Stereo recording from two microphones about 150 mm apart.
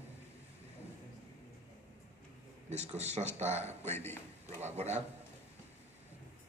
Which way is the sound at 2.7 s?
50° right (ahead or behind).